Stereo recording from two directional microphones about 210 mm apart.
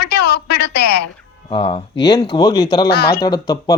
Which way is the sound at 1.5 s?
25° left (ahead or behind).